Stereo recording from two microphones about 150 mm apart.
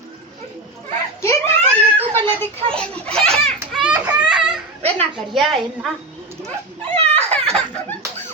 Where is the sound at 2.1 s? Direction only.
15° left (ahead or behind).